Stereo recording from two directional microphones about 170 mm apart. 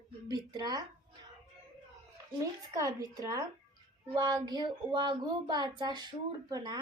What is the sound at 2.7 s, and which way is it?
Speech, 20° right (ahead or behind).